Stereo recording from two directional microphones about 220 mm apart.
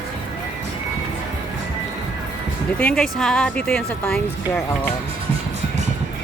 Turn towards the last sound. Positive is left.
turn(degrees=5)  # may be behind; listen again after turning